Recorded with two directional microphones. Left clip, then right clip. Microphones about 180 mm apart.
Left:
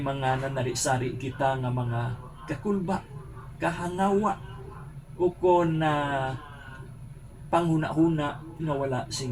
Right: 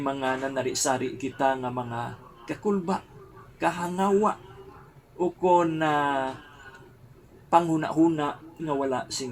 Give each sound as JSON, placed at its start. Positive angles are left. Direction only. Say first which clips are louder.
{"t": 0.0, "sound": "speech", "louder": "even", "side_deg": -45}
{"t": 5.4, "sound": "speech", "louder": "right 2 dB", "side_deg": -50}
{"t": 7.5, "sound": "speech", "louder": "right 3 dB", "side_deg": -50}